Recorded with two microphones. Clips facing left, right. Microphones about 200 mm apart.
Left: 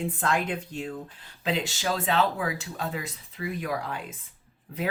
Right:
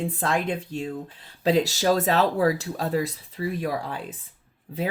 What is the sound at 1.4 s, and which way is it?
Speech, 40° right (ahead or behind).